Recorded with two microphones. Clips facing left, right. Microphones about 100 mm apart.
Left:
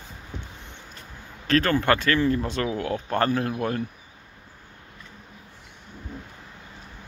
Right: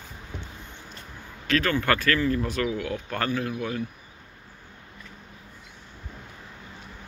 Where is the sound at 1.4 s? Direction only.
35° left (ahead or behind).